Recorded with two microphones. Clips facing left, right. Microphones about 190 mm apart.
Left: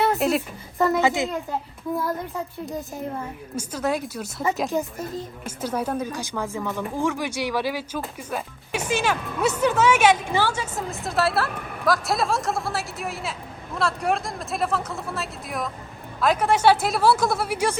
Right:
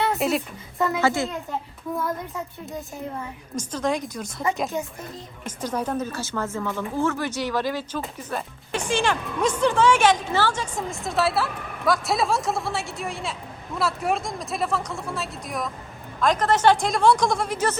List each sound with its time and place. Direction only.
0.0 s a woman's voice: centre (ahead or behind)
1.0 s speech: 20° left (ahead or behind)
2.6 s speech: centre (ahead or behind)